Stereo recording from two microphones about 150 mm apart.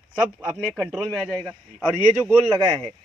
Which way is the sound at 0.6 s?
5° right (ahead or behind).